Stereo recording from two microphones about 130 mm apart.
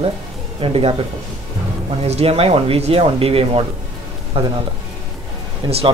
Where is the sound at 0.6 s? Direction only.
50° right (ahead or behind).